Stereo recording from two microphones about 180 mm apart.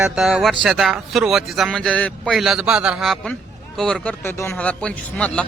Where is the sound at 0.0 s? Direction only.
5° right (ahead or behind).